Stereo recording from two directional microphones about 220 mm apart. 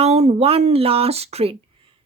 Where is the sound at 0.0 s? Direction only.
30° right (ahead or behind).